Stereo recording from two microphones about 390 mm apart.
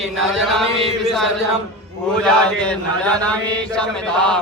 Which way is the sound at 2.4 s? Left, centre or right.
Centre.